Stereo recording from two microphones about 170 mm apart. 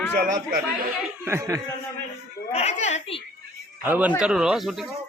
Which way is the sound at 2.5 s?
40° left (ahead or behind).